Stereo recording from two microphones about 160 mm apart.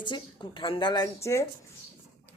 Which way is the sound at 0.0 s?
30° left (ahead or behind).